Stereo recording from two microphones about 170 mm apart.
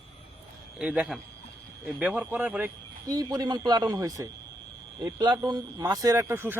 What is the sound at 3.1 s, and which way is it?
A man's voice, 25° right (ahead or behind).